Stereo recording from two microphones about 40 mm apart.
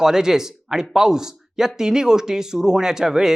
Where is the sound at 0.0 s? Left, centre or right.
Centre.